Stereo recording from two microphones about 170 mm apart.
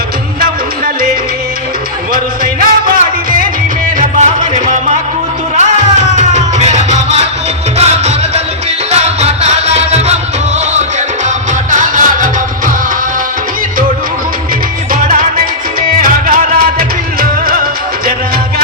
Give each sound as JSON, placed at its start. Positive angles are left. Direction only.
{"t": 2.1, "sound": "music", "side_deg": -60}
{"t": 11.7, "sound": "music", "side_deg": -50}
{"t": 14.9, "sound": "music", "side_deg": -55}